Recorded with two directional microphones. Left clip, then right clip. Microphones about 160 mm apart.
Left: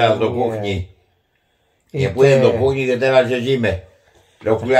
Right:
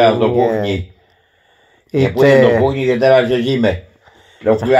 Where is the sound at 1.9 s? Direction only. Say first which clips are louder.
Right 3 dB; 30° right (ahead or behind).